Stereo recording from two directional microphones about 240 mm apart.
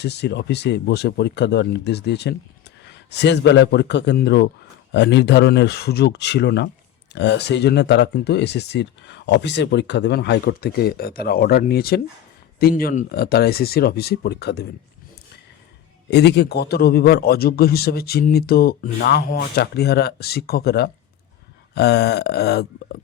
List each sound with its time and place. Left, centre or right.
0.0 s a man's voice: left
16.0 s a man's voice: left